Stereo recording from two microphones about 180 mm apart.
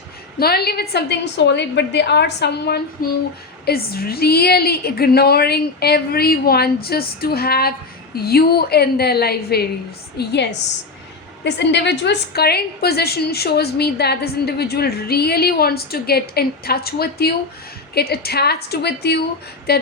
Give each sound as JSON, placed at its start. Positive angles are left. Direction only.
{"t": 0.3, "sound": "a woman's voice", "side_deg": 60}